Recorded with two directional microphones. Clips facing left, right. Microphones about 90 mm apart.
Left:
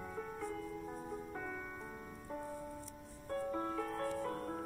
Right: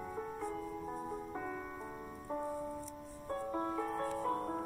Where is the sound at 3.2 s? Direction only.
25° right (ahead or behind).